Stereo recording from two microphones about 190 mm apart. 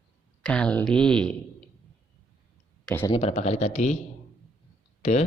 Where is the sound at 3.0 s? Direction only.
30° left (ahead or behind).